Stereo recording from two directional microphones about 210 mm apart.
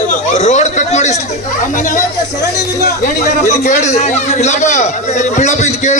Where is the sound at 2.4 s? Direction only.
50° left (ahead or behind).